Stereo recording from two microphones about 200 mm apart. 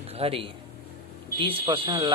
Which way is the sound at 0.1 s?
30° right (ahead or behind).